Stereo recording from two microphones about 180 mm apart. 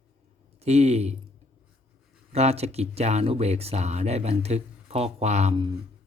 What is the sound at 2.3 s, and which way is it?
Speech, 35° right (ahead or behind).